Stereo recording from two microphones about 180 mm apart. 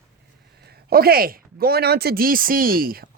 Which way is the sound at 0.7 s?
60° right (ahead or behind).